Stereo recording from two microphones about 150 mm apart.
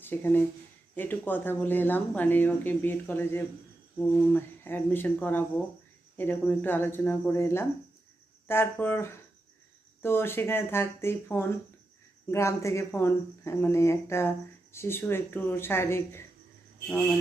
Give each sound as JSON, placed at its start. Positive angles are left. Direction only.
{"t": 0.0, "sound": "speech", "side_deg": 15}